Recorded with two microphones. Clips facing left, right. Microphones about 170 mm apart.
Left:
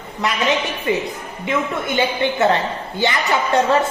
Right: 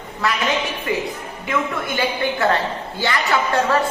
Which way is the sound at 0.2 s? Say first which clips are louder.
Even; 20° left (ahead or behind).